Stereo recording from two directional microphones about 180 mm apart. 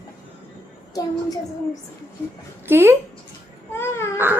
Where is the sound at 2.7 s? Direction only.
15° right (ahead or behind).